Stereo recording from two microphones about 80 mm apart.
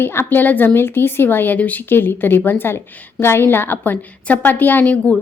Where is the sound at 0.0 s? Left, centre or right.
Left.